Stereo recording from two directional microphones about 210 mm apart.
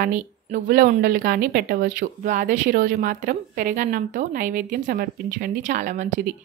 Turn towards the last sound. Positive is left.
turn(degrees=-35)  # may be behind; listen again after turning